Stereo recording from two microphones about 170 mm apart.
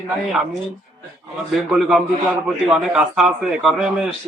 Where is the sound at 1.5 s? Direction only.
Centre (ahead or behind).